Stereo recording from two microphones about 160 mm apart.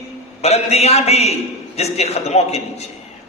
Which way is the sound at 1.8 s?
40° left (ahead or behind).